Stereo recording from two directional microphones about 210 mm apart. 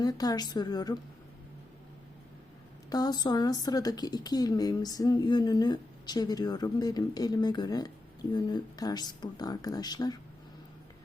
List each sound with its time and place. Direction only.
0.0 s speech: 20° left (ahead or behind)
2.9 s speech: 20° left (ahead or behind)